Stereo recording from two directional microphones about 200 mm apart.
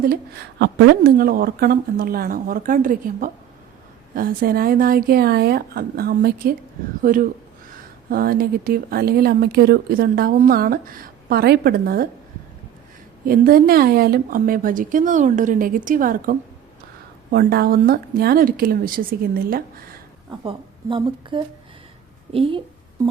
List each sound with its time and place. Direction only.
0.6 s speech: 55° right (ahead or behind)
13.2 s speech: 50° right (ahead or behind)
20.4 s a woman's voice: 25° right (ahead or behind)